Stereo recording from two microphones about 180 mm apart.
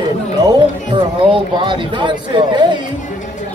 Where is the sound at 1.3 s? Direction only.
25° right (ahead or behind).